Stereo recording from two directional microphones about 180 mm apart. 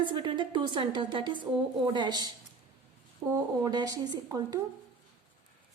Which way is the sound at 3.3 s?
20° right (ahead or behind).